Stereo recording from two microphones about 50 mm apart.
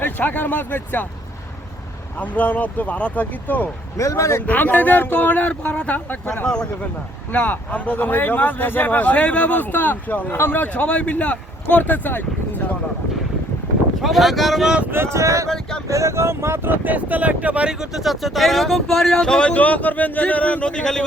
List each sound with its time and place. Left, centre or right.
0.0 s a man's voice: left
2.1 s a man's voice: left
3.9 s speech: left
4.4 s a man's voice: left
7.5 s a man's voice: left
10.3 s a man's voice: left
10.8 s speech: left
14.0 s speech: centre
14.8 s vehicle: right
15.4 s speech: centre
15.9 s vehicle: right
16.6 s speech: right
17.7 s speech: centre